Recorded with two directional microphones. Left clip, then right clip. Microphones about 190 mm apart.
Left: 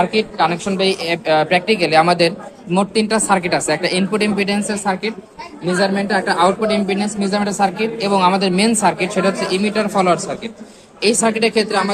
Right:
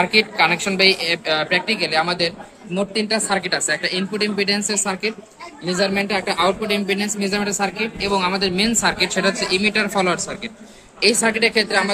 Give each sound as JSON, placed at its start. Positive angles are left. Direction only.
{"t": 0.0, "sound": "a woman's voice", "side_deg": 5}
{"t": 0.9, "sound": "a woman's voice", "side_deg": 15}
{"t": 4.5, "sound": "a woman's voice", "side_deg": 10}
{"t": 8.8, "sound": "a woman's voice", "side_deg": 15}